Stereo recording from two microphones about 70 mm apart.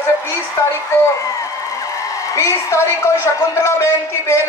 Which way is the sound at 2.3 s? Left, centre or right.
Left.